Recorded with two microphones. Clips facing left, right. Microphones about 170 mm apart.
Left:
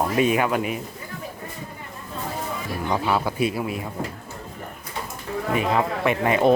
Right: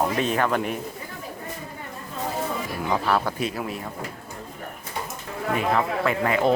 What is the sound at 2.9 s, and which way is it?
Speech, 5° left (ahead or behind).